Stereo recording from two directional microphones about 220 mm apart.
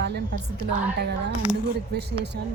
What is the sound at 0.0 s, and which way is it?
A woman's voice, 50° right (ahead or behind).